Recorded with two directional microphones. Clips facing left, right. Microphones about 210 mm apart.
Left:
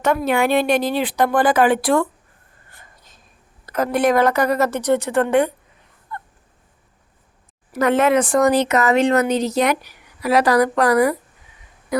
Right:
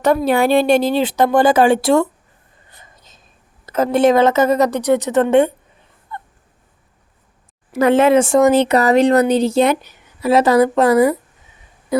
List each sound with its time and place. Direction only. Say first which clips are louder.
0.0 s speech: right 4 dB; 35° right (ahead or behind)
2.6 s whispering: right 2 dB; 20° right (ahead or behind)
3.7 s speech: right 4 dB; 25° right (ahead or behind)
6.1 s a sound: right 1 dB; 25° right (ahead or behind)
7.7 s speech: right 4 dB; 30° right (ahead or behind)